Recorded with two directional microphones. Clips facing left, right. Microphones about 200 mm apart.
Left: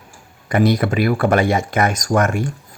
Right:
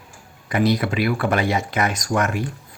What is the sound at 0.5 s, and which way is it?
Speech, 50° left (ahead or behind).